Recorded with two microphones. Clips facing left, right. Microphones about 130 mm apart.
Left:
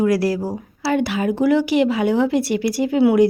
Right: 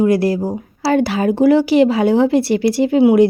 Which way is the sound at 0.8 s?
35° right (ahead or behind).